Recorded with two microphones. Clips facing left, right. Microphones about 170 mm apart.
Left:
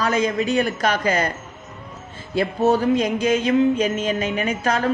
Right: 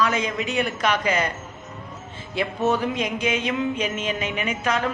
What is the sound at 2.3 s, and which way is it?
A woman's voice, 40° left (ahead or behind).